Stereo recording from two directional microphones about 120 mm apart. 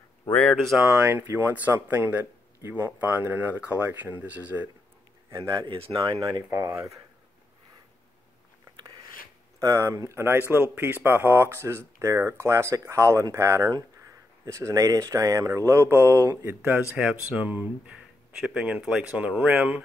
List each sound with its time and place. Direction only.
0.3 s speech: 10° left (ahead or behind)
0.8 s speech: 20° right (ahead or behind)
5.4 s speech: 35° right (ahead or behind)
9.6 s speech: 25° right (ahead or behind)
16.9 s speech: 10° right (ahead or behind)